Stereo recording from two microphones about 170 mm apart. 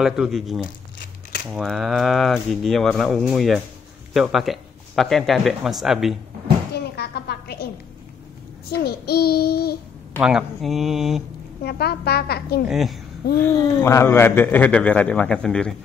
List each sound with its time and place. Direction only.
0.0 s speech: 5° right (ahead or behind)
6.7 s music: 70° left (ahead or behind)
8.7 s child singing: 70° left (ahead or behind)
10.2 s speech: centre (ahead or behind)
11.6 s a woman's voice: 70° left (ahead or behind)
12.6 s speech: centre (ahead or behind)
13.4 s a man's voice: 15° left (ahead or behind)